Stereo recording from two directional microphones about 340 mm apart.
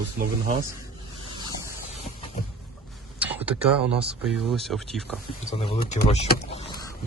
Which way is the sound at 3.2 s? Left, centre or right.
Centre.